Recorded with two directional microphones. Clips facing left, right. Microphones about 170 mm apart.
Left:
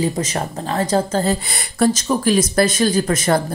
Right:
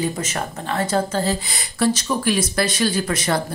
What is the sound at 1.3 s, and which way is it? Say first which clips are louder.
Speech: left 3 dB; 55° left (ahead or behind).